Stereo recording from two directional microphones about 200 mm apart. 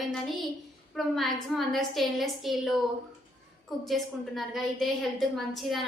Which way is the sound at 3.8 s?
Centre (ahead or behind).